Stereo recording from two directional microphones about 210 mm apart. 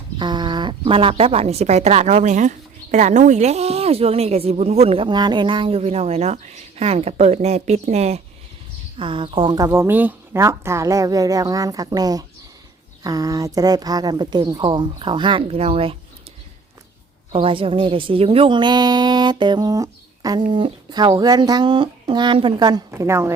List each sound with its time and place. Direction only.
0.2 s a woman's voice: 20° right (ahead or behind)
17.3 s a woman's voice: 25° right (ahead or behind)